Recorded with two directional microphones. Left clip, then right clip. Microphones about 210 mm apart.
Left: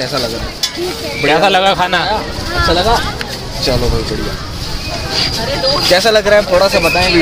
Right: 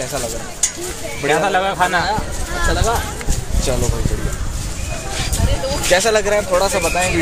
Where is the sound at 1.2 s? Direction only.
45° left (ahead or behind).